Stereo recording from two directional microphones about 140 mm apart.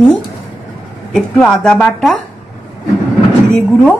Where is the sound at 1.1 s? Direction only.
5° left (ahead or behind).